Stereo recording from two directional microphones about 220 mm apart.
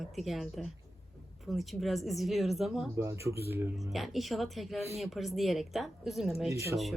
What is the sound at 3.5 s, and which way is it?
A woman's voice, centre (ahead or behind).